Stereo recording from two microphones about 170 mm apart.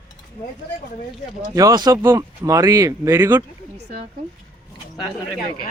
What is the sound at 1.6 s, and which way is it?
Speech, 20° right (ahead or behind).